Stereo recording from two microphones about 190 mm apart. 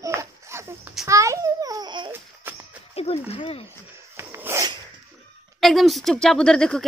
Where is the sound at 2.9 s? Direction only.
30° left (ahead or behind).